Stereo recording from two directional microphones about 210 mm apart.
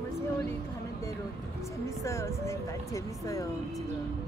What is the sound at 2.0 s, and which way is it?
Speech, 15° left (ahead or behind).